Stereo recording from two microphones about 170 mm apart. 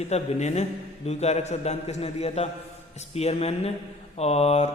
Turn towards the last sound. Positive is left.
turn(degrees=40)  # may be behind; listen again after turning